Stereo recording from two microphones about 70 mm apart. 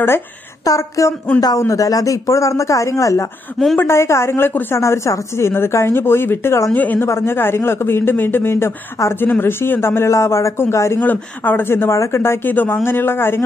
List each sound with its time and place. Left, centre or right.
0.7 s speech: left
3.7 s speech: left
6.7 s speech: left
7.1 s speech: left
11.0 s speech: left